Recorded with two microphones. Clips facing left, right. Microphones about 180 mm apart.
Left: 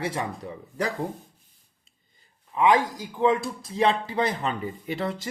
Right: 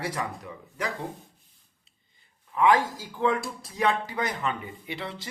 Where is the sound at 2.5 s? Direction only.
20° left (ahead or behind); by 5.3 s 45° left (ahead or behind).